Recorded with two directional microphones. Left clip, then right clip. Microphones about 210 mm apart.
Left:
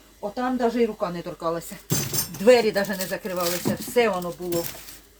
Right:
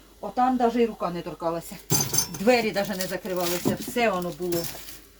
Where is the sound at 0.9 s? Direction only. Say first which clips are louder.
Left 1 dB; 30° left (ahead or behind).